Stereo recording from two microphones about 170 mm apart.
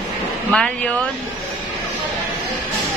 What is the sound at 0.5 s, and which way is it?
Speech, 5° left (ahead or behind).